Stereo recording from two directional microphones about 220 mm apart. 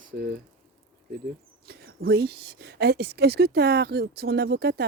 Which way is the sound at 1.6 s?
45° right (ahead or behind).